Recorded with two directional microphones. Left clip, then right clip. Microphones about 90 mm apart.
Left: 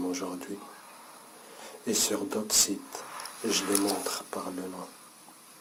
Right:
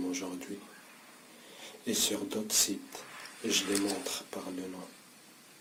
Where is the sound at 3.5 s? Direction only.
15° left (ahead or behind).